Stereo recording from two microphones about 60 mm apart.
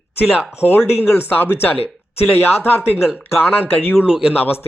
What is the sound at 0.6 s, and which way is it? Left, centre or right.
Speech, left.